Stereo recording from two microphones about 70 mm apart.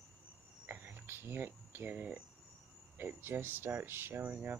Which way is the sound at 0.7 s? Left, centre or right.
Right.